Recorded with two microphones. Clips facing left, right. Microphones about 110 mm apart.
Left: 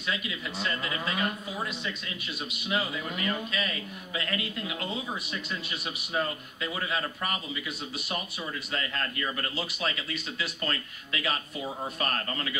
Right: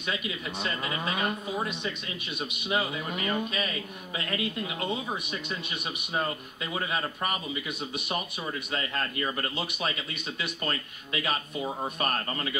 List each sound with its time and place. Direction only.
0.6 s a man's voice: 20° right (ahead or behind)
6.7 s a man's voice: 20° right (ahead or behind)
8.7 s a man's voice: 25° right (ahead or behind)